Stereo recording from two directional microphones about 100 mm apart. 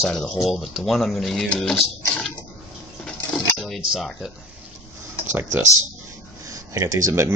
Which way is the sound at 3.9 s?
Centre (ahead or behind).